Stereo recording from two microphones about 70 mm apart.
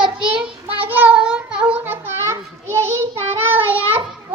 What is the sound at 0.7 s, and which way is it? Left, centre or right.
Cat, right.